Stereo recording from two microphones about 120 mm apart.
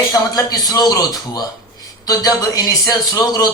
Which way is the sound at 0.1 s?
30° left (ahead or behind).